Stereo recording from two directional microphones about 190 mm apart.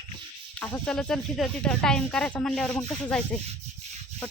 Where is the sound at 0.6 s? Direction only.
5° left (ahead or behind).